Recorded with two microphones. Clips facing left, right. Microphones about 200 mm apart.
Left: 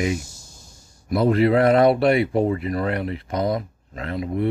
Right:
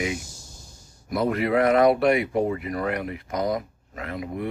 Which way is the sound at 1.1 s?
30° left (ahead or behind).